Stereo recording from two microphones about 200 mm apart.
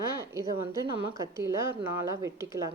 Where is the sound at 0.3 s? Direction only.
15° right (ahead or behind).